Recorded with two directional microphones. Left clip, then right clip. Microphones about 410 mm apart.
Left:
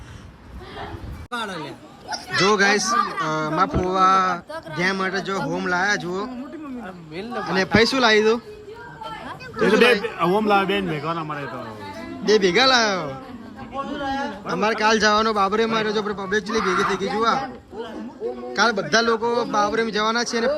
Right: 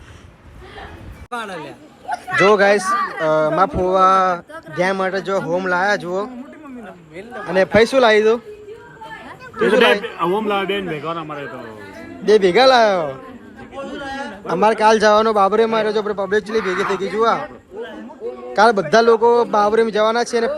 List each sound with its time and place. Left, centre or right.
1.3 s a man's voice: centre
7.5 s a man's voice: centre
9.6 s a man's voice: centre
12.2 s a man's voice: centre
13.7 s a sound: centre
14.4 s a man's voice: centre
18.5 s a man's voice: centre